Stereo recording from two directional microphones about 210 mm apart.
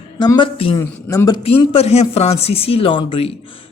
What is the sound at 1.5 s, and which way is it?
A woman's voice, 30° left (ahead or behind).